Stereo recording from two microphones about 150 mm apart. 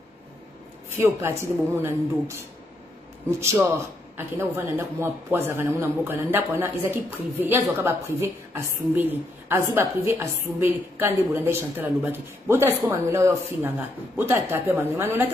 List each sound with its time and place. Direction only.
0.8 s a woman's voice: 15° right (ahead or behind)